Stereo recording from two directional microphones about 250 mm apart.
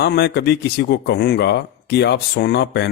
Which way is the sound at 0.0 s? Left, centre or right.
Left.